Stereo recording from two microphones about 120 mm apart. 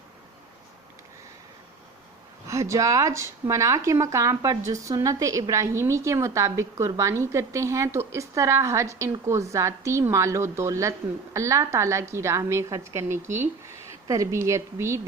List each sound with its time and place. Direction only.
2.5 s speech: 25° right (ahead or behind)